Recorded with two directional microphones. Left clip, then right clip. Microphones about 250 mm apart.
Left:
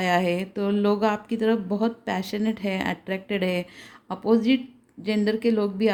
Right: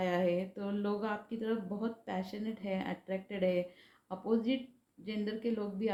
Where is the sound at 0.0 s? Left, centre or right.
Left.